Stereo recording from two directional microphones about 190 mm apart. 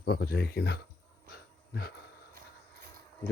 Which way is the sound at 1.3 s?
55° left (ahead or behind).